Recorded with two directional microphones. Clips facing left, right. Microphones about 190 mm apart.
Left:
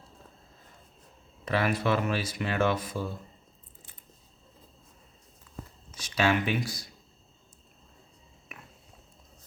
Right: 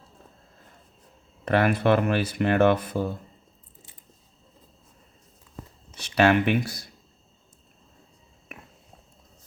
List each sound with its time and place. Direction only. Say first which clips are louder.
1.5 s speech: right 6 dB; 60° right (ahead or behind)
6.0 s speech: right 6 dB; 60° right (ahead or behind)